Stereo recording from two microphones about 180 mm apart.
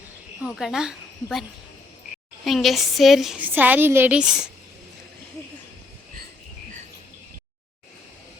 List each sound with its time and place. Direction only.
0.4 s a woman's voice: centre (ahead or behind)